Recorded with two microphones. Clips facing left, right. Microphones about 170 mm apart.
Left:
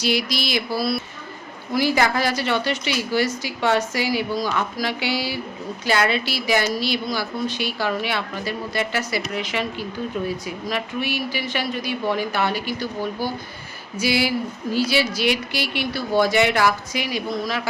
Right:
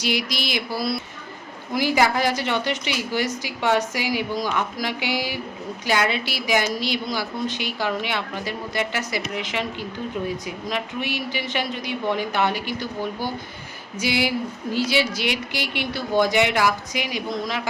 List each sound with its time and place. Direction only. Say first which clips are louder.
0.0 s a woman's voice: left 2 dB; 15° right (ahead or behind)
14.0 s speech: left 2 dB; 20° right (ahead or behind)